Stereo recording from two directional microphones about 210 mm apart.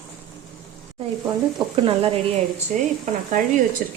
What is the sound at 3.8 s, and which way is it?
Speech, 40° right (ahead or behind).